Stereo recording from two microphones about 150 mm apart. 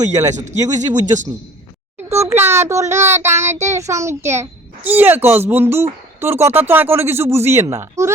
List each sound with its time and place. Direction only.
0.0 s speech: 20° right (ahead or behind)
2.2 s a child's voice: 15° right (ahead or behind)